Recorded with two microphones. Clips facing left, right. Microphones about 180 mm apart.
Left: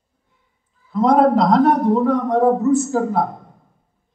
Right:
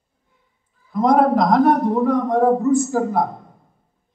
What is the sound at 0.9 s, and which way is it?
A man's voice, 15° right (ahead or behind).